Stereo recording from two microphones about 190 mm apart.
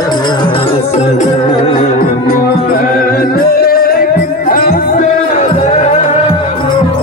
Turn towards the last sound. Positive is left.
turn(degrees=40)  # may be behind; listen again after turning